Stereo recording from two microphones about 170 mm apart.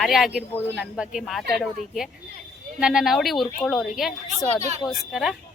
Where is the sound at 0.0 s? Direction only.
Centre (ahead or behind).